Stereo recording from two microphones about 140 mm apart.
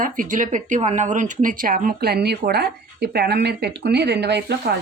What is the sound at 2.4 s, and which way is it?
Speech, 70° right (ahead or behind).